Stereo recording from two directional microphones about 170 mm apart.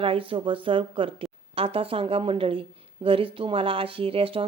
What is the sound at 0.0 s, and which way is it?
A woman's voice, 30° right (ahead or behind).